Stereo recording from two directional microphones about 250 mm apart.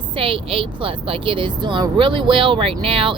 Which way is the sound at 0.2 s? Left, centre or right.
Right.